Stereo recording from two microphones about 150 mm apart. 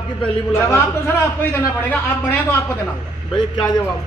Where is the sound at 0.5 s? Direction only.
15° left (ahead or behind).